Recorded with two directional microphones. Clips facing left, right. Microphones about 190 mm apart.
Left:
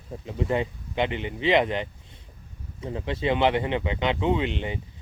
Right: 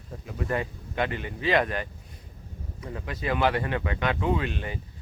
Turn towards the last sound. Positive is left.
turn(degrees=20)  # may be behind; listen again after turning